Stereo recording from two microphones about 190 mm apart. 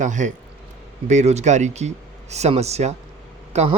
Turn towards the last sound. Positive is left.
turn(degrees=-35)  # may be behind; listen again after turning